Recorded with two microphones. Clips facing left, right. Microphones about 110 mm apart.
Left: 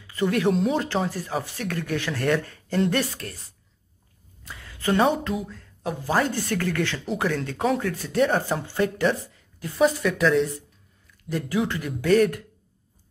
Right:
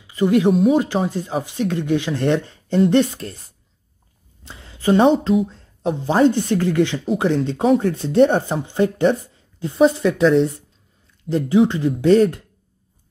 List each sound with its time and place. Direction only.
0.0 s speech: 20° right (ahead or behind)
4.5 s speech: 25° right (ahead or behind)